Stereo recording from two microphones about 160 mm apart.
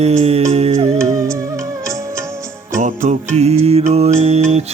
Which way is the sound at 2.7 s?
50° right (ahead or behind).